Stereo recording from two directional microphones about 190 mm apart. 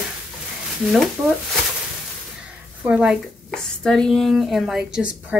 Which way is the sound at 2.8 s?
5° right (ahead or behind).